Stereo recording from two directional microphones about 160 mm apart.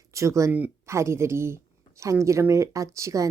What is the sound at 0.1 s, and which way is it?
Speech, 20° right (ahead or behind).